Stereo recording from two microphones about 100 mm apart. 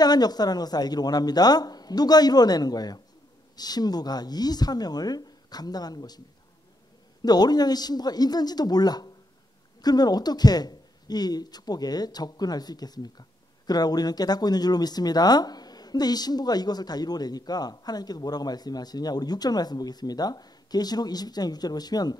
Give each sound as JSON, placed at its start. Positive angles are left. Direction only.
{"t": 0.0, "sound": "a man's voice", "side_deg": 40}